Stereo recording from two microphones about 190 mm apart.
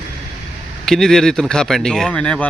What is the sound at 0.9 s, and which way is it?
Speech, centre (ahead or behind).